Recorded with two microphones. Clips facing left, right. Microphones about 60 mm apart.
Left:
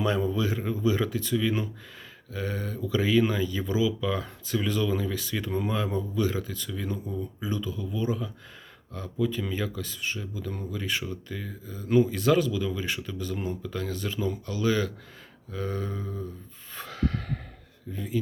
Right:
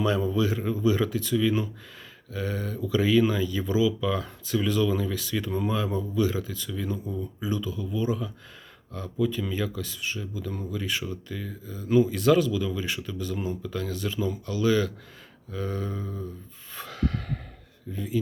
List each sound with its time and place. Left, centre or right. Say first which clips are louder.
0.0 s speech: right 2 dB; left
12.2 s speech: right 2 dB; left
16.7 s a sound: even; left
17.9 s speech: right 1 dB; left